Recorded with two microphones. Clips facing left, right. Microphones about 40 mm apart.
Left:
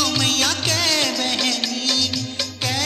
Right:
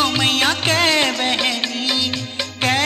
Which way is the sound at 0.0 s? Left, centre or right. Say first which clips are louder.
Right 3 dB; right.